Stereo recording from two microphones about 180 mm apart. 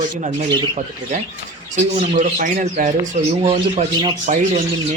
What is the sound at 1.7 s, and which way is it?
Speech, 40° right (ahead or behind).